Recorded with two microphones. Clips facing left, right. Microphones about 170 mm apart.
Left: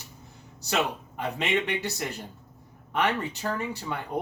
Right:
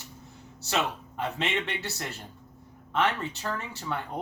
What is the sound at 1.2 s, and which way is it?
Speech, 15° left (ahead or behind).